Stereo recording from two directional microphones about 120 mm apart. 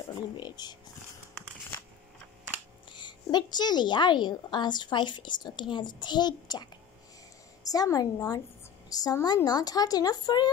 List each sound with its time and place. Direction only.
0.4 s a woman's voice: 35° left (ahead or behind)
2.9 s a woman's voice: 40° left (ahead or behind)
7.7 s a woman's voice: 30° left (ahead or behind)